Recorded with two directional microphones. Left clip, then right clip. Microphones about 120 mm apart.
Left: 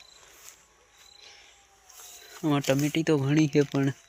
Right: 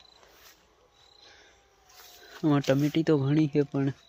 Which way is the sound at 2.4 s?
25° right (ahead or behind).